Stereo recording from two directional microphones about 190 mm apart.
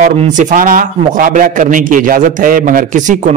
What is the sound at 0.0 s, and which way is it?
A man's voice, 40° right (ahead or behind).